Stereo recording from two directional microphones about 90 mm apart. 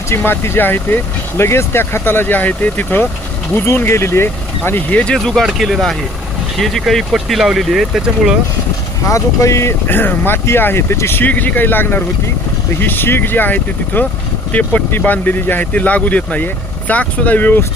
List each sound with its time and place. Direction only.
0.2 s speech: 25° left (ahead or behind)
5.1 s speech: centre (ahead or behind)
9.0 s speech: 35° left (ahead or behind); by 17.6 s 20° left (ahead or behind)